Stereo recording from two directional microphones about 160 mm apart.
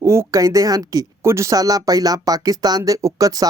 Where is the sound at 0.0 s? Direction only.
15° right (ahead or behind).